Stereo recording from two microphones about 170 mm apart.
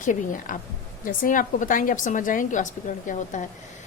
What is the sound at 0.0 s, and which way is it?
A woman's voice, 50° left (ahead or behind).